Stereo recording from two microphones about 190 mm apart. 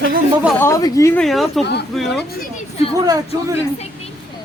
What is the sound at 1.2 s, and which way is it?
A woman's voice, centre (ahead or behind).